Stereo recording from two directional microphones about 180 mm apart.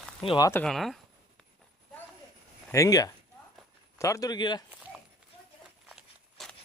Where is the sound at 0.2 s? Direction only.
25° left (ahead or behind).